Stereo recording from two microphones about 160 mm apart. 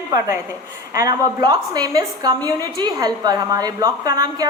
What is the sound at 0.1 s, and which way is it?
A woman's voice, 20° right (ahead or behind).